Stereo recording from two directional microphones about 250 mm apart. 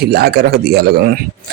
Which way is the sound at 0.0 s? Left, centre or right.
Right.